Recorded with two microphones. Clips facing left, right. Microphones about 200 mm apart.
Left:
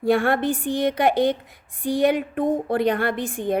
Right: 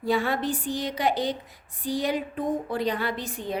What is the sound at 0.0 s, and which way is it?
A woman's voice, 55° left (ahead or behind).